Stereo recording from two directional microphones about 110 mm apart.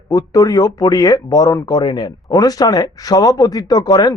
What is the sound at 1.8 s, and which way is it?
Speech, 40° left (ahead or behind).